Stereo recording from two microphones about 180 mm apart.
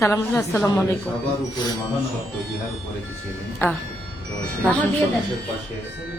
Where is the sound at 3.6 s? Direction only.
15° left (ahead or behind).